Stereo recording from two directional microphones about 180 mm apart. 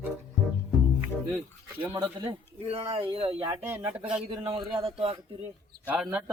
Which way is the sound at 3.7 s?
10° right (ahead or behind).